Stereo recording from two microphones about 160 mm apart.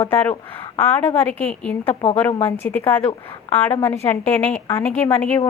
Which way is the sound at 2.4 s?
15° left (ahead or behind).